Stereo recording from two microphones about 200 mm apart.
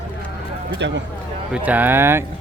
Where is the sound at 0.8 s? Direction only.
60° right (ahead or behind).